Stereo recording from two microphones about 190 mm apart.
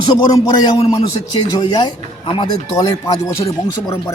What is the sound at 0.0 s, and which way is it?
A man's voice, 20° left (ahead or behind).